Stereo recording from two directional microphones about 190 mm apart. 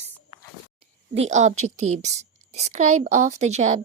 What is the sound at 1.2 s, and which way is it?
A woman's voice, 40° right (ahead or behind).